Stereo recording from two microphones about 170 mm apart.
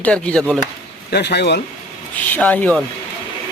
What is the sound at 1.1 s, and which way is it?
Speech, 80° left.